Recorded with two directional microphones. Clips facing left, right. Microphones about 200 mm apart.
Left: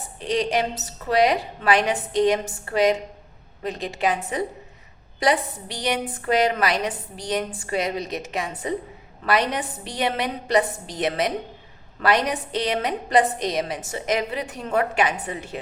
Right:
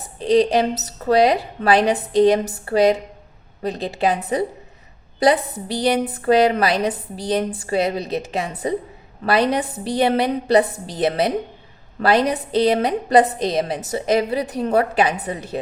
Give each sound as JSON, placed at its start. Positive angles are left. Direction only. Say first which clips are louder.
{"t": 0.2, "sound": "a woman's voice", "louder": "right 7 dB", "side_deg": -35}
{"t": 5.6, "sound": "a woman's voice", "louder": "right 9 dB", "side_deg": -35}